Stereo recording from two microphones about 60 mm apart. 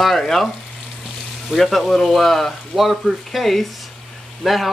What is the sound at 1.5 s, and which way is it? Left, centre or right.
Speech, centre.